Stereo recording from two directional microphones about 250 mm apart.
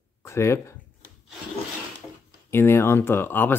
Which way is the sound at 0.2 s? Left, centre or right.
Centre.